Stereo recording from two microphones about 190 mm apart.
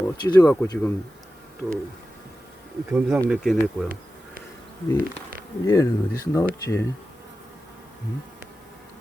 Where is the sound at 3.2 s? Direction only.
Centre (ahead or behind).